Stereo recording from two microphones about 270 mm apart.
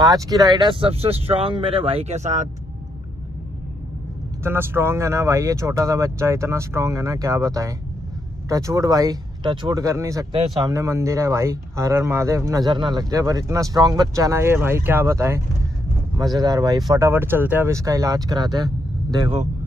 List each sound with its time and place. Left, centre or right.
0.0 s speech: centre
4.4 s speech: centre